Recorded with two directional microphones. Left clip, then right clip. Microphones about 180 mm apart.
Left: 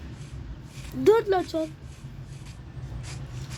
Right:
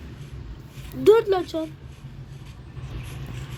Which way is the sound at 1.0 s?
45° left (ahead or behind).